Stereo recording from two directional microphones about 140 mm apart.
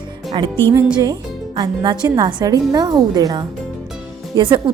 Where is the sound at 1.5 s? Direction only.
30° right (ahead or behind).